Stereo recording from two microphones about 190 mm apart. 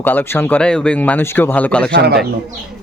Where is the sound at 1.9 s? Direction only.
60° right (ahead or behind).